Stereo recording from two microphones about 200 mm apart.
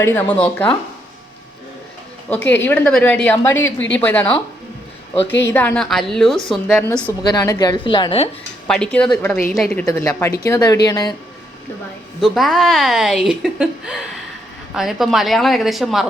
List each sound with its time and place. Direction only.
0.0 s a woman's voice: 10° left (ahead or behind)
2.3 s a woman's voice: 10° left (ahead or behind)
5.4 s speech: 10° left (ahead or behind)
7.2 s a woman's voice: 20° left (ahead or behind)
8.6 s speech: 5° left (ahead or behind)
9.9 s a woman's voice: 15° left (ahead or behind)
12.2 s speech: centre (ahead or behind)